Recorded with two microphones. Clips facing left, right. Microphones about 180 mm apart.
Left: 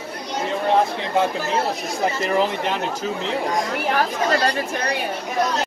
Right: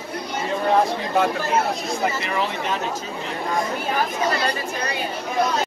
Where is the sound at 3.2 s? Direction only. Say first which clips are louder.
Even; 80° left.